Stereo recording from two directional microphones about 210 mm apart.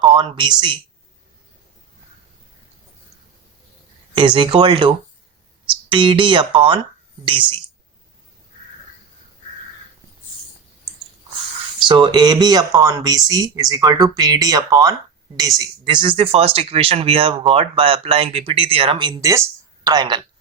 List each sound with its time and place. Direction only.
0.0 s speech: 20° right (ahead or behind)
4.1 s speech: 25° right (ahead or behind)
11.8 s a woman's voice: 20° right (ahead or behind)